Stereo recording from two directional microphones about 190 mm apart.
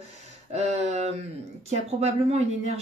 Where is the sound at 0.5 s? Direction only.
35° right (ahead or behind).